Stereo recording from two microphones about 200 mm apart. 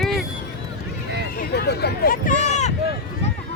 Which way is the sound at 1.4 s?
55° left (ahead or behind).